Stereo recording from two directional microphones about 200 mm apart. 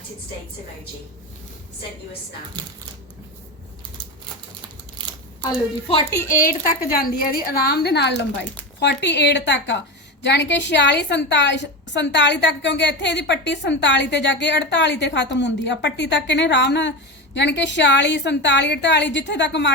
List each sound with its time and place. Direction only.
6.4 s a woman's voice: 45° left (ahead or behind)